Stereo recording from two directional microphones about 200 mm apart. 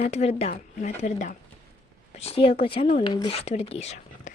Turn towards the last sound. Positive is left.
turn(degrees=35)  # may be behind; listen again after turning